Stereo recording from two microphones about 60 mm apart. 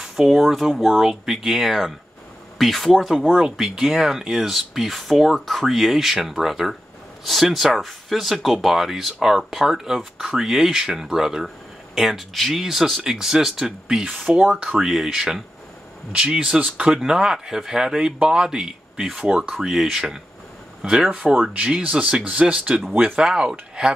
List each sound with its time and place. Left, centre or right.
0.0 s speech: centre
16.1 s speech: centre
21.1 s speech: centre